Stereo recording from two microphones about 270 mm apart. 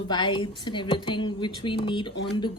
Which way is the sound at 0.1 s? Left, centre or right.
Centre.